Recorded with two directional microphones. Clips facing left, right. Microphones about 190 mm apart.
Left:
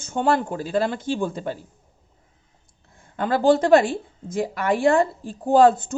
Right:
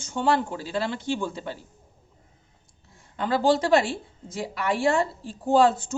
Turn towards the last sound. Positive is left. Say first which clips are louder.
# left 4 dB
turn(degrees=55)  # may be behind; listen again after turning